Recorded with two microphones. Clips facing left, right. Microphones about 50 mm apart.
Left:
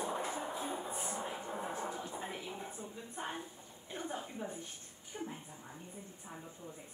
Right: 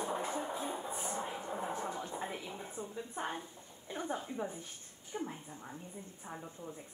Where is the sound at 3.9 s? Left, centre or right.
Centre.